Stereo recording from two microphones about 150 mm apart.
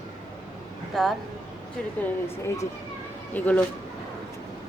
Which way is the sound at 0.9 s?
Centre (ahead or behind).